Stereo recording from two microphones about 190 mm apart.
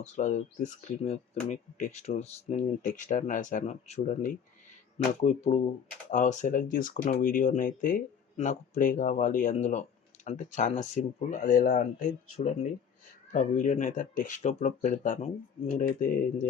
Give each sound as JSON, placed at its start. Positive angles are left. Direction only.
{"t": 0.0, "sound": "speech", "side_deg": 40}